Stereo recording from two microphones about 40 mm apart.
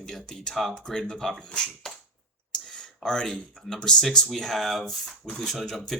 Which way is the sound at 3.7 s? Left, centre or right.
Centre.